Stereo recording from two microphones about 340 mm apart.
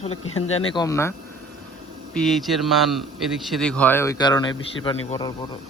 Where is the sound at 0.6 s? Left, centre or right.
Centre.